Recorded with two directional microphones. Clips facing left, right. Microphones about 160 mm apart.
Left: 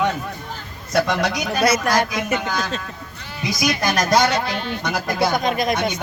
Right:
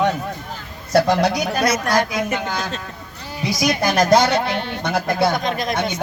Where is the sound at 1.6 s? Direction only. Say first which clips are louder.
Left 2 dB; 5° left (ahead or behind).